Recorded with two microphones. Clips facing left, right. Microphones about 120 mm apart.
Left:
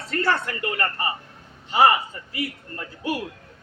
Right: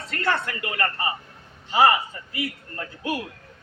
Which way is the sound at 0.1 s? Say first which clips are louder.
Left 2 dB; 25° left (ahead or behind).